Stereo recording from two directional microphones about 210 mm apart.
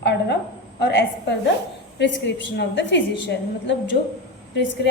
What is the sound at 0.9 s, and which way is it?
A woman's voice, 55° left (ahead or behind).